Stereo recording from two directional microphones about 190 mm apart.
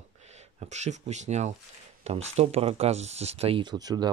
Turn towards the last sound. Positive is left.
turn(degrees=-20)  # may be behind; listen again after turning